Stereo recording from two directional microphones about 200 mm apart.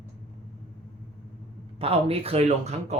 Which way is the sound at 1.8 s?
30° right (ahead or behind).